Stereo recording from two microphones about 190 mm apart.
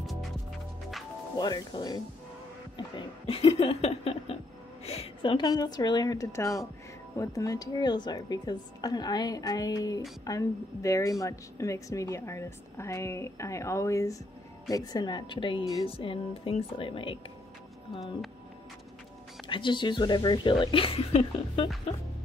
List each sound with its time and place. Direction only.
0.0 s music: centre (ahead or behind)
1.4 s speech: 20° left (ahead or behind)
3.0 s a sound: 30° left (ahead or behind)
4.8 s a woman's voice: 30° left (ahead or behind)
19.4 s speech: 25° left (ahead or behind)